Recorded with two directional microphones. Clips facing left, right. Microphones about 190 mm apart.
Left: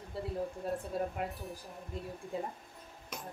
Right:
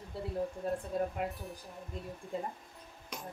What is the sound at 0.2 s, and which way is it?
A woman's voice, centre (ahead or behind).